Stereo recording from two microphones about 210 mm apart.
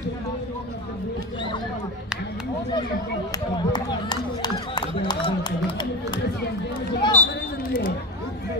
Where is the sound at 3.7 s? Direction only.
20° left (ahead or behind).